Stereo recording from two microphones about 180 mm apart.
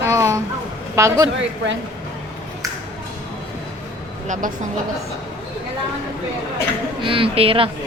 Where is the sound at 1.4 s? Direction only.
90° right.